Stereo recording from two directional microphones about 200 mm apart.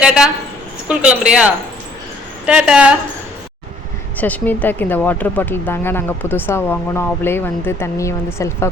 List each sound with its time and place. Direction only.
0.0 s speech: 5° right (ahead or behind)
4.2 s speech: 10° left (ahead or behind)